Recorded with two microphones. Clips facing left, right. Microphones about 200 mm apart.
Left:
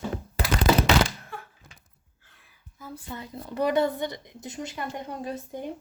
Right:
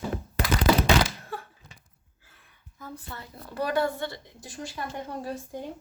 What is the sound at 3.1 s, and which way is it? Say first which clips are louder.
A woman's voice: left 5 dB; 20° left (ahead or behind).